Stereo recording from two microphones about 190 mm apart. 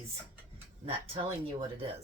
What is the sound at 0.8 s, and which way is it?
Speech, 30° right (ahead or behind).